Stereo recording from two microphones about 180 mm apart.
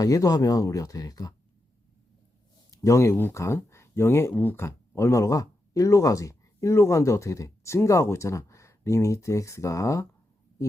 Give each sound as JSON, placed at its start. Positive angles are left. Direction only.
{"t": 0.0, "sound": "speech", "side_deg": 20}
{"t": 2.6, "sound": "speech", "side_deg": 15}